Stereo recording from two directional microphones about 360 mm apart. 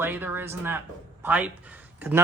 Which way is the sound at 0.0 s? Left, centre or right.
Centre.